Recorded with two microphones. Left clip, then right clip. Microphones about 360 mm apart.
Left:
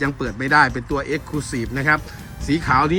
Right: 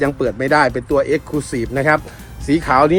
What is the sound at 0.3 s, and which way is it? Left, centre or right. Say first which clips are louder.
Speech: even; centre.